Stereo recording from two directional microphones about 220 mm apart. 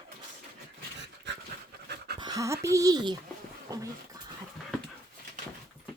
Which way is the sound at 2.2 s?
15° right (ahead or behind).